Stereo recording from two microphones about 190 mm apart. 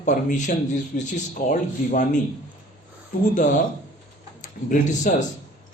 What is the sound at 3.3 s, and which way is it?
A man's voice, 40° left (ahead or behind).